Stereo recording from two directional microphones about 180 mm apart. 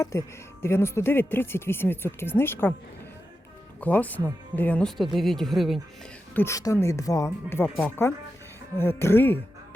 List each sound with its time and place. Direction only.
0.0 s speech: 15° left (ahead or behind)
3.8 s speech: 10° left (ahead or behind)
6.3 s speech: 15° left (ahead or behind)